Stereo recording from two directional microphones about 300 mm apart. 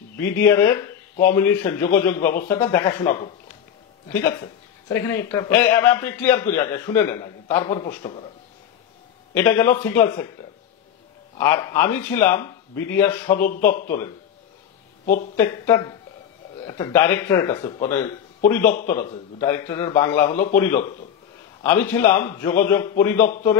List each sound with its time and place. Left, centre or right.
0.2 s a man's voice: centre
9.3 s a man's voice: centre
11.3 s a man's voice: centre
13.7 s a man's voice: left
15.3 s a man's voice: centre